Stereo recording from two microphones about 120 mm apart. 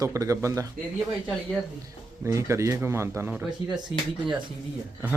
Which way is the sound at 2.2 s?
25° right (ahead or behind).